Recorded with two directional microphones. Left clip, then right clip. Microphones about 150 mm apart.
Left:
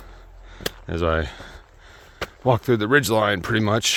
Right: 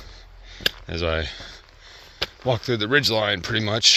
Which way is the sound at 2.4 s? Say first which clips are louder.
Left 4 dB; 65° left (ahead or behind).